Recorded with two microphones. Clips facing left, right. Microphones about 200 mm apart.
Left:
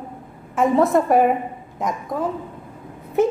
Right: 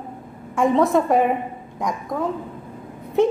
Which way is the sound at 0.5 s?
Centre (ahead or behind).